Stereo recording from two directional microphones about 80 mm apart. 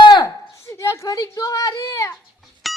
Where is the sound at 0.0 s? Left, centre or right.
Left.